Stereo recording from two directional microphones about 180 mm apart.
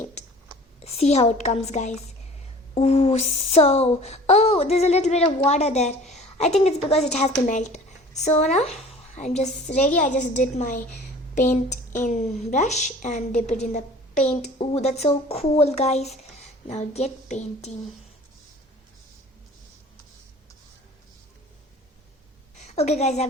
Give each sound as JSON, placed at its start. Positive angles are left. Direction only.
{"t": 0.8, "sound": "a woman's voice", "side_deg": 35}
{"t": 22.5, "sound": "a woman's voice", "side_deg": 40}